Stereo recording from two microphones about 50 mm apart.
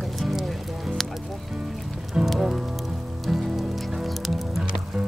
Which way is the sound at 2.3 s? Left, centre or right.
Centre.